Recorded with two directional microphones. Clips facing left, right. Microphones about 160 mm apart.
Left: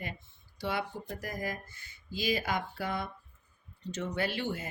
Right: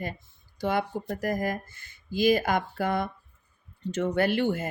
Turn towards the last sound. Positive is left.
turn(degrees=-55)  # may be behind; listen again after turning